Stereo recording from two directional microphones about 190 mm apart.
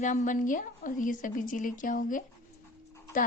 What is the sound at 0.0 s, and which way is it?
A woman's voice, 40° left (ahead or behind).